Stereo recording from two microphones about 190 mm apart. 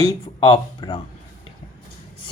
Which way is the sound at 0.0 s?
25° left (ahead or behind).